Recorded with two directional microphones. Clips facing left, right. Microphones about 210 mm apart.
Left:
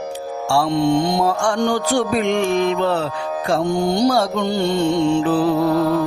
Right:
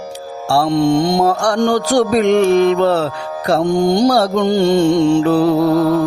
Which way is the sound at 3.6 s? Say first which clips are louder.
Right 5 dB; 90° right.